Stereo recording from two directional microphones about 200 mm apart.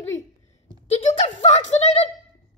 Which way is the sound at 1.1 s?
35° left (ahead or behind).